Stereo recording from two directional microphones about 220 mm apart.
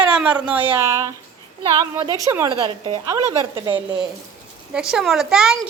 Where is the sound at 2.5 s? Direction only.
20° right (ahead or behind).